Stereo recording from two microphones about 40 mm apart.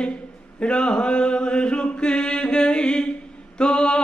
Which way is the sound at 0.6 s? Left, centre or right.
Left.